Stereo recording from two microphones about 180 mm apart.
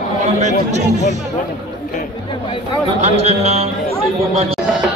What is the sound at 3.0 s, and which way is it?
Speech, 40° right (ahead or behind).